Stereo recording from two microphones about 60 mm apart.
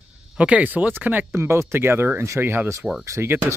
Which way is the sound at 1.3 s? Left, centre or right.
Right.